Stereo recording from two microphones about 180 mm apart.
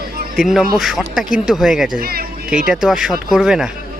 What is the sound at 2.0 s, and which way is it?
Speech, 55° right (ahead or behind).